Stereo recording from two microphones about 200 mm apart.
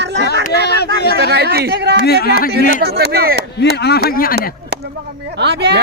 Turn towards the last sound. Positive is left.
turn(degrees=-55)  # may be behind; listen again after turning